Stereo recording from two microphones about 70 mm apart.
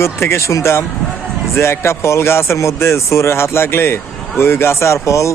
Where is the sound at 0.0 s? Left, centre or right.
Left.